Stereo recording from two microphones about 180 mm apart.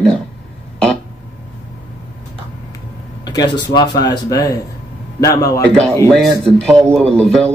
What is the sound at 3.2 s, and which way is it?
Speech, 25° left (ahead or behind).